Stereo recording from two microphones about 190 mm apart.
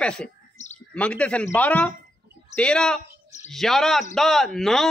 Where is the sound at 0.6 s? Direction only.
35° left (ahead or behind).